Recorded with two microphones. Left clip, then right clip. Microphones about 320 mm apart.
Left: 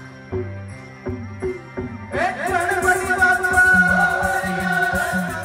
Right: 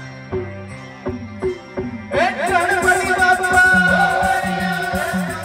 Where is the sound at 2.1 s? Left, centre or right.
Right.